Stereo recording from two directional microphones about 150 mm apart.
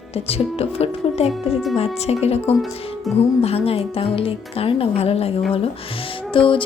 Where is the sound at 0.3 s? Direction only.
40° left (ahead or behind).